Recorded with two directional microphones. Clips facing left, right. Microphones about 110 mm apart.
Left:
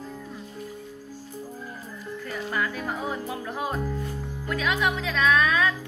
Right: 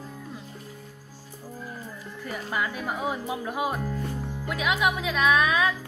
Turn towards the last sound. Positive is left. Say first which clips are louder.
# even
turn(degrees=-10)  # may be behind; listen again after turning